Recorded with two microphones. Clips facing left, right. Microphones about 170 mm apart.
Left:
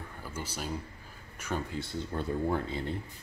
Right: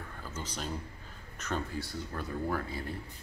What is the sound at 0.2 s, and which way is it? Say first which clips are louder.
Speech: left 1 dB; 10° left (ahead or behind).